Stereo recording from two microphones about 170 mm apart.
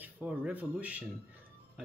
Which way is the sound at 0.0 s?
10° right (ahead or behind).